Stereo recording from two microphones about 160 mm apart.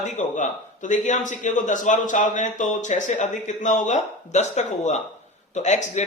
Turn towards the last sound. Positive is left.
turn(degrees=45)  # may be behind; listen again after turning